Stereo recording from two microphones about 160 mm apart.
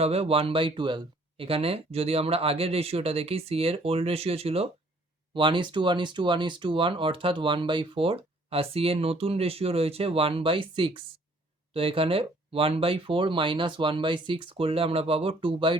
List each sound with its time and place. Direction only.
0.0 s speech: 40° right (ahead or behind)